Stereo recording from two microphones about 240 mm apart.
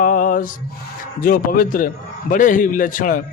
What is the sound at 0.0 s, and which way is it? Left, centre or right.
Mantra, left.